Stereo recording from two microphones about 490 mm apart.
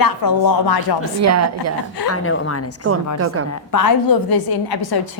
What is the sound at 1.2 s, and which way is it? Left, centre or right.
Speech, right.